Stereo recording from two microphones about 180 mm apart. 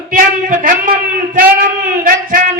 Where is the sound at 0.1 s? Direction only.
50° right (ahead or behind).